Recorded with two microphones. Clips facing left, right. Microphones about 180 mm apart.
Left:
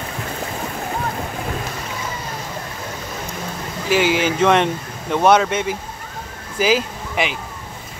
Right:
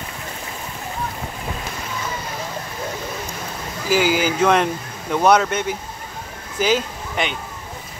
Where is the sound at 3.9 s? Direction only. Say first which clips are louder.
Left 1 dB; centre (ahead or behind).